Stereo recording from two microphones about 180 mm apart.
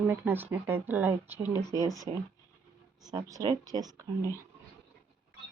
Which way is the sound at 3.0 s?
20° right (ahead or behind).